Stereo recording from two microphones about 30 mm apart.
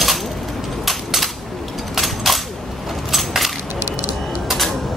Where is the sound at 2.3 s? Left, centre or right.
Centre.